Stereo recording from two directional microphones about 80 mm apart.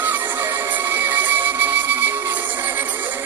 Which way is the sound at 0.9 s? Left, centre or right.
Right.